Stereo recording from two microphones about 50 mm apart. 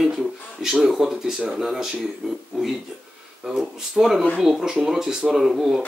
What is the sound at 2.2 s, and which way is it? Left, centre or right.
Speech, right.